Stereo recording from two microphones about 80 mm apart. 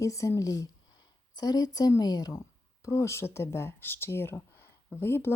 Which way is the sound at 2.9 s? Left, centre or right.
Left.